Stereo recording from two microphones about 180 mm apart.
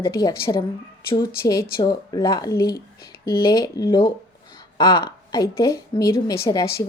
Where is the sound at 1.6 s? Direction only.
25° left (ahead or behind).